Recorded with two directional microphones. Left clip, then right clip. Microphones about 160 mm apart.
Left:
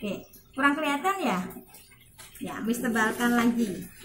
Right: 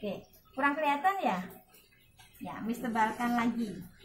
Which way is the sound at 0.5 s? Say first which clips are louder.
Left 4 dB; 20° right (ahead or behind).